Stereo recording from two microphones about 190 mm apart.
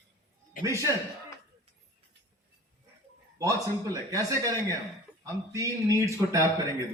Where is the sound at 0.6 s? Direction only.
15° right (ahead or behind).